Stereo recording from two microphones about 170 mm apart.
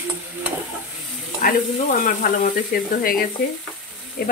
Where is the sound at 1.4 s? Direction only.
55° left (ahead or behind).